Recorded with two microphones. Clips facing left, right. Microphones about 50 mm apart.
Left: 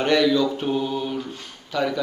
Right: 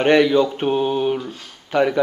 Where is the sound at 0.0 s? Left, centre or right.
Right.